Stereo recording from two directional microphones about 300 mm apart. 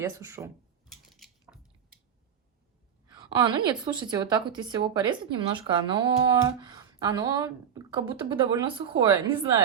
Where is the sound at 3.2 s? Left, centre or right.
Centre.